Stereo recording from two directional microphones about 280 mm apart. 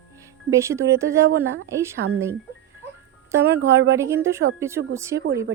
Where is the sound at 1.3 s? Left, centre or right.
Right.